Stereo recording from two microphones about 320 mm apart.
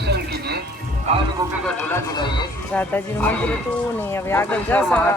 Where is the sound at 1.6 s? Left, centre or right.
Centre.